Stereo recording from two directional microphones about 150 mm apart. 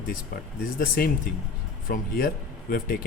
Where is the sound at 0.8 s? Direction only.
75° left (ahead or behind).